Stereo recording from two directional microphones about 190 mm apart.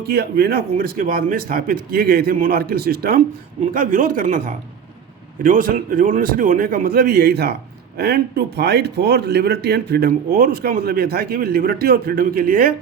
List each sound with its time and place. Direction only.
0.0 s a man's voice: 55° right (ahead or behind)